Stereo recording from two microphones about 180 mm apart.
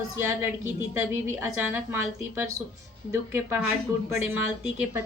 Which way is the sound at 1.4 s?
10° right (ahead or behind).